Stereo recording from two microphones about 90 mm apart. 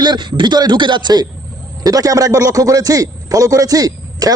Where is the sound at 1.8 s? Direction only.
40° right (ahead or behind).